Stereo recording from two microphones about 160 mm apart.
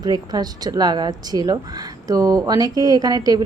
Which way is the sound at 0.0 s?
25° right (ahead or behind).